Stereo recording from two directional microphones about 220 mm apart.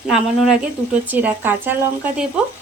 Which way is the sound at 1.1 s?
10° right (ahead or behind).